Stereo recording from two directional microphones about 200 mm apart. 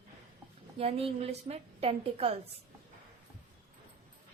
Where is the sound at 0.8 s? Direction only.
30° right (ahead or behind).